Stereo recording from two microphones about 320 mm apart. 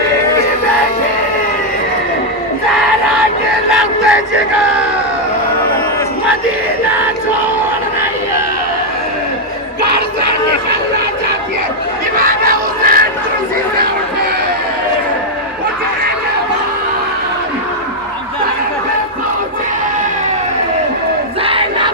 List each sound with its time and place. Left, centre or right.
3.7 s crowd: centre
9.9 s a sound: right
12.2 s crowd: right
21.4 s crowd: centre